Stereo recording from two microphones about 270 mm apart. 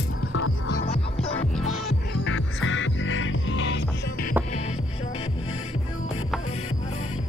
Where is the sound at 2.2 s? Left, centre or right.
Left.